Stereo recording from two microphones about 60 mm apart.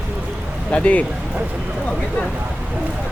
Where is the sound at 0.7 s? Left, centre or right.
Left.